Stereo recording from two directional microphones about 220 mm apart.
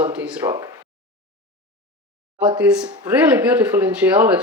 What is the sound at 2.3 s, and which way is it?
Speech, 20° right (ahead or behind).